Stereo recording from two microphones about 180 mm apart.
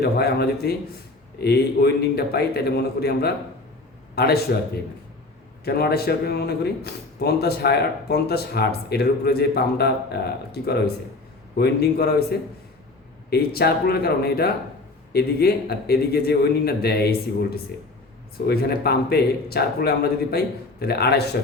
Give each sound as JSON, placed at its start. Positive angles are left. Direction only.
{"t": 0.0, "sound": "a man's voice", "side_deg": 65}
{"t": 5.6, "sound": "speech", "side_deg": 60}
{"t": 13.3, "sound": "speech", "side_deg": 60}